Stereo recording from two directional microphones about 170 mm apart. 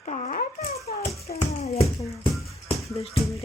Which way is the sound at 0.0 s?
45° left (ahead or behind).